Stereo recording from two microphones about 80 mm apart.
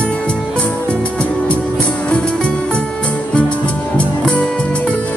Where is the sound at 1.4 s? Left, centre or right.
Centre.